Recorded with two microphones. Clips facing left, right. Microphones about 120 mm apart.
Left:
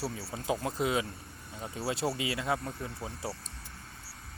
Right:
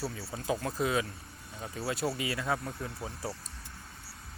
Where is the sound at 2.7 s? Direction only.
15° left (ahead or behind).